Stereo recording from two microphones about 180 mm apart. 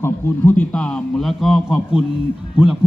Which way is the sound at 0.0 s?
10° left (ahead or behind).